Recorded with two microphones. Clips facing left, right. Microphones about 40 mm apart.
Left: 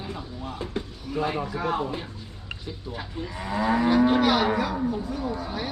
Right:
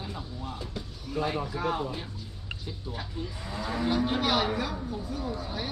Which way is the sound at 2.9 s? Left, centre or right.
Left.